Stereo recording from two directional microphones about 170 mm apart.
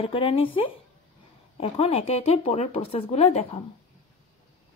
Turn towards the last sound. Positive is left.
turn(degrees=40)  # may be behind; listen again after turning